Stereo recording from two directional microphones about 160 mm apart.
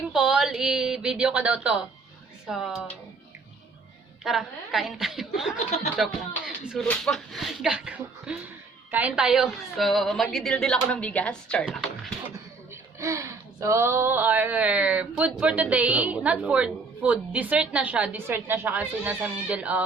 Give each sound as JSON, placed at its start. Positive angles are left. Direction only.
{"t": 0.1, "sound": "a woman's voice", "side_deg": -5}
{"t": 4.2, "sound": "a woman's voice", "side_deg": 0}
{"t": 13.0, "sound": "a sound", "side_deg": -20}